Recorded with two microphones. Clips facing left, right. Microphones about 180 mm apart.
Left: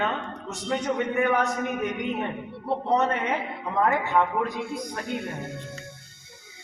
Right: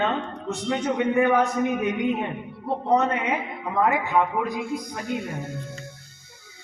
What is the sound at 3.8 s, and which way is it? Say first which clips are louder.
A man's voice: right 1 dB; 10° right (ahead or behind).